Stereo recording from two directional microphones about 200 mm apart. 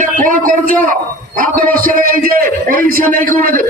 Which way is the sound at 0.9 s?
45° right (ahead or behind).